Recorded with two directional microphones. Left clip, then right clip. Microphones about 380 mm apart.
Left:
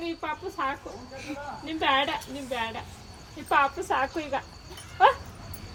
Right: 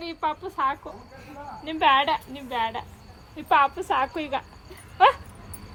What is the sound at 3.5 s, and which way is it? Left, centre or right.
Speech, right.